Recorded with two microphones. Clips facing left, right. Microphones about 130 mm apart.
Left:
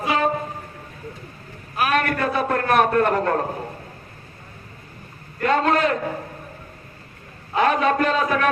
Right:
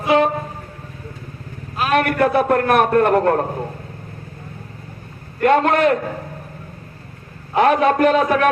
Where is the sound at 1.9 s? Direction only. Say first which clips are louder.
Right 9 dB; 60° right (ahead or behind).